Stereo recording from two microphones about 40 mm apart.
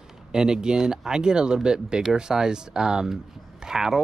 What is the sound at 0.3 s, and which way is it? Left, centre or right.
Speech, centre.